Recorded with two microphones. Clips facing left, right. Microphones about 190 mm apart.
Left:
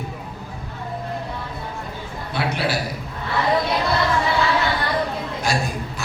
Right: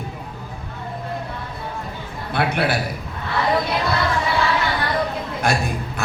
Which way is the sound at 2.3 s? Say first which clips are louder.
Right 3 dB; 55° right (ahead or behind).